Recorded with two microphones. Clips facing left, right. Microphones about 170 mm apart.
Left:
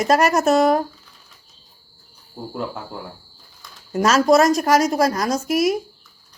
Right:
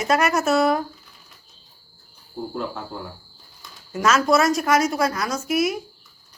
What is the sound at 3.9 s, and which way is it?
A woman's voice, 40° left (ahead or behind).